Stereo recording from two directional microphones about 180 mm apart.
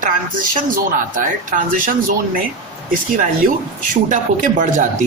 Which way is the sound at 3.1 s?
50° right (ahead or behind).